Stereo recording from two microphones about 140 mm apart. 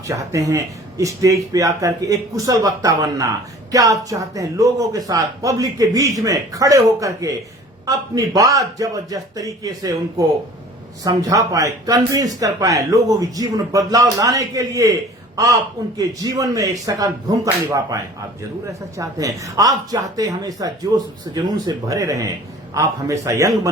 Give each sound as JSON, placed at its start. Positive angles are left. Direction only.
{"t": 0.1, "sound": "speech", "side_deg": -20}
{"t": 16.0, "sound": "speech", "side_deg": -25}